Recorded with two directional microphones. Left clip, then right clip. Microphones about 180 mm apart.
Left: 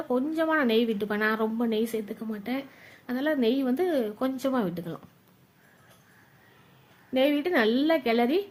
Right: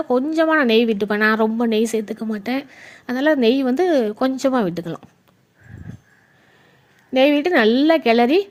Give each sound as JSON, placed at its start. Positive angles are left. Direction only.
{"t": 0.1, "sound": "a woman's voice", "side_deg": -35}
{"t": 7.1, "sound": "a woman's voice", "side_deg": -40}